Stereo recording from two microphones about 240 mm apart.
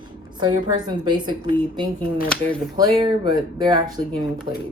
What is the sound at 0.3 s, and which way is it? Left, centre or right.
A woman's voice, centre.